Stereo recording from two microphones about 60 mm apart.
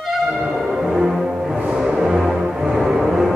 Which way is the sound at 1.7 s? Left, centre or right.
Centre.